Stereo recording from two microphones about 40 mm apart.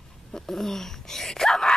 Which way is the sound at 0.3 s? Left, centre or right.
Centre.